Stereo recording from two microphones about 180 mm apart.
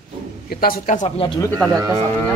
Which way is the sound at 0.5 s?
55° left (ahead or behind).